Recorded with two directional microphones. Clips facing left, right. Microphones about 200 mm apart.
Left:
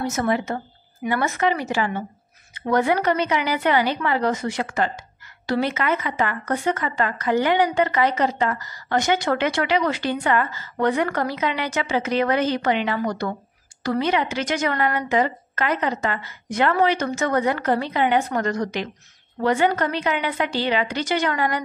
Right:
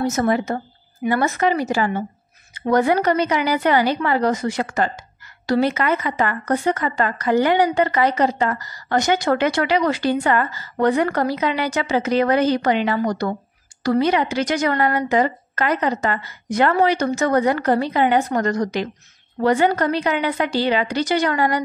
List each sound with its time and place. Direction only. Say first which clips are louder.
0.0 s speech: right 3 dB; 40° right (ahead or behind)